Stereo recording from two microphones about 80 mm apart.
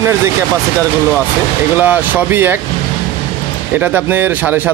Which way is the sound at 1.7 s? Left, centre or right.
Right.